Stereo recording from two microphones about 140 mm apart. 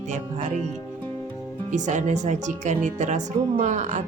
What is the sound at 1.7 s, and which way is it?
Speech, 60° right (ahead or behind).